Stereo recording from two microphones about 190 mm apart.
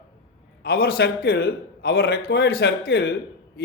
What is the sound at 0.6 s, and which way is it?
A man's voice, 55° left (ahead or behind).